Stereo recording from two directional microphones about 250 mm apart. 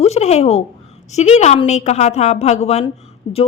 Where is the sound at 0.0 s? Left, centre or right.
Left.